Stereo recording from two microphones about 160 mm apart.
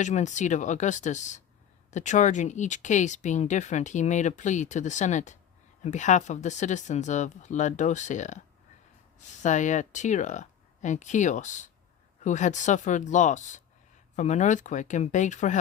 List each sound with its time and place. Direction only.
0.0 s speech: 50° left (ahead or behind)